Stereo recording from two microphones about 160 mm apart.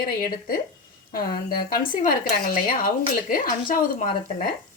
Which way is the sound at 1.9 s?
55° left (ahead or behind).